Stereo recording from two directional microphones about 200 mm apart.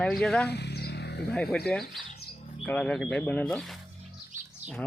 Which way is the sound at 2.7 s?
5° left (ahead or behind).